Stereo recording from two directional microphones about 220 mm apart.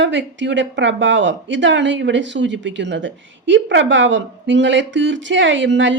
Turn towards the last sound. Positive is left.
turn(degrees=-55)  # may be behind; listen again after turning